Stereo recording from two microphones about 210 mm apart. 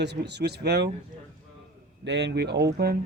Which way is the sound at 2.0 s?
55° right (ahead or behind).